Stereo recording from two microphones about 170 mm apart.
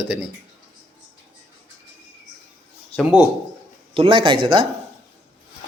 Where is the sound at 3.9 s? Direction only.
30° right (ahead or behind).